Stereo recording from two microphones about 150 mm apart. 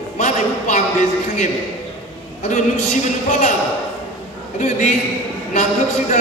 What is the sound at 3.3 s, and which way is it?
Speech, 55° left (ahead or behind).